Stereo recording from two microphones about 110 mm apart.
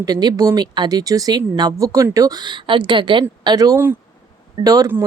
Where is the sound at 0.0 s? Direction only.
40° right (ahead or behind).